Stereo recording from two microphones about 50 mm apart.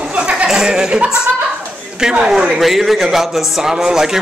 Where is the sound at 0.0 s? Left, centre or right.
Centre.